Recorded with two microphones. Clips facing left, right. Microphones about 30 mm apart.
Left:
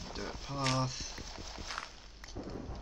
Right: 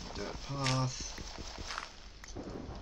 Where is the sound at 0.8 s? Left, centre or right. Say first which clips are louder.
Left 1 dB; centre.